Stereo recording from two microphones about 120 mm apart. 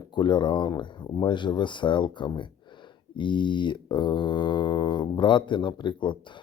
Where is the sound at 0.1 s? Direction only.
40° left (ahead or behind).